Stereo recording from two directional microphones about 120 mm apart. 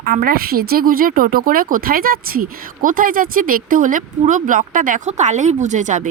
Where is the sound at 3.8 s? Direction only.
90° right.